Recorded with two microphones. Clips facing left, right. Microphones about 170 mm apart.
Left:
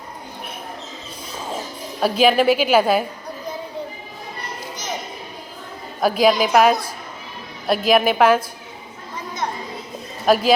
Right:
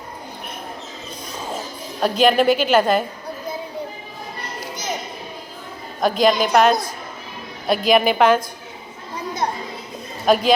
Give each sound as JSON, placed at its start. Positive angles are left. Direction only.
{"t": 2.0, "sound": "a woman's voice", "side_deg": 5}
{"t": 6.0, "sound": "a woman's voice", "side_deg": 5}
{"t": 10.2, "sound": "a woman's voice", "side_deg": 5}